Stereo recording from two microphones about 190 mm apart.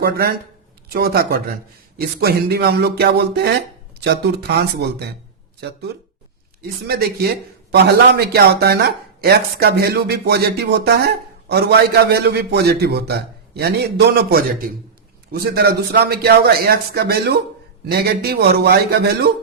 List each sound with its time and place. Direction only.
0.0 s speech: 50° right (ahead or behind)
6.6 s speech: 55° right (ahead or behind)